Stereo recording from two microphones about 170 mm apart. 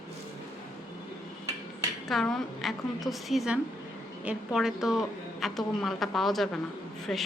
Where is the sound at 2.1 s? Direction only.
Centre (ahead or behind).